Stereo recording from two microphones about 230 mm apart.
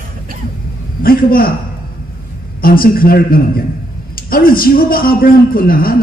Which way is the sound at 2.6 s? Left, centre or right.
Left.